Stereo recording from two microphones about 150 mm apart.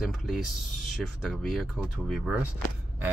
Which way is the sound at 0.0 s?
Centre (ahead or behind).